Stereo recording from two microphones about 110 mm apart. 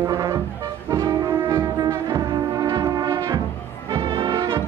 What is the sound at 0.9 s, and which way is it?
Music, 35° right (ahead or behind).